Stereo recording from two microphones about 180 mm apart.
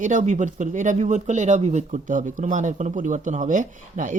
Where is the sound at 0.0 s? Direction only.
45° right (ahead or behind).